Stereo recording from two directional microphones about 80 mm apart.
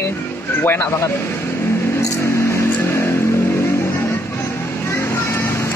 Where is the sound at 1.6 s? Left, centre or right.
Left.